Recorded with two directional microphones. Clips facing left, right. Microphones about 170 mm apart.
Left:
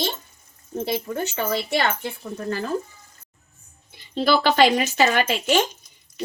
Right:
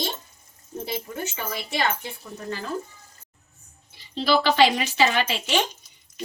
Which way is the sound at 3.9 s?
55° left (ahead or behind).